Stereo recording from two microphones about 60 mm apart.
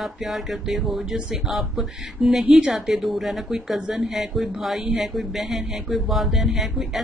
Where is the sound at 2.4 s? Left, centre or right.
Centre.